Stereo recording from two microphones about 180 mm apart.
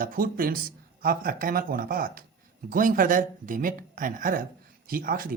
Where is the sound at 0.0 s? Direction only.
50° right (ahead or behind).